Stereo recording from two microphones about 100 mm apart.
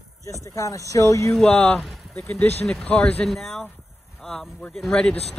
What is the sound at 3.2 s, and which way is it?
Speech, 5° left (ahead or behind).